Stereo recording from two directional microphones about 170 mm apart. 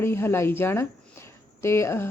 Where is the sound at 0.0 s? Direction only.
15° left (ahead or behind).